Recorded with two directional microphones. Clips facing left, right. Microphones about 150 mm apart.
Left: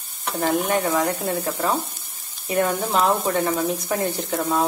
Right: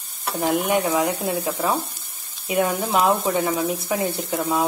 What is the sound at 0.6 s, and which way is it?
Speech, 10° right (ahead or behind).